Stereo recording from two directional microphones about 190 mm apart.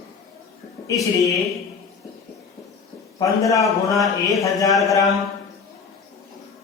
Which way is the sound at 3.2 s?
15° left (ahead or behind).